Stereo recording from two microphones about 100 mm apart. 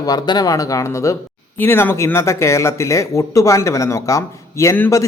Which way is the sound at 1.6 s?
20° left (ahead or behind).